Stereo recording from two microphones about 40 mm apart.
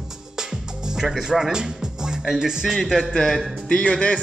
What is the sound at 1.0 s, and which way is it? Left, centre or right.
Speech, centre.